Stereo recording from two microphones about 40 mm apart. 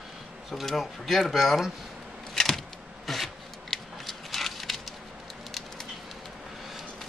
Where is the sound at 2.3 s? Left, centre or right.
Centre.